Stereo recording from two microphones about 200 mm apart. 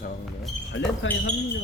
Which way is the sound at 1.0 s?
70° left (ahead or behind).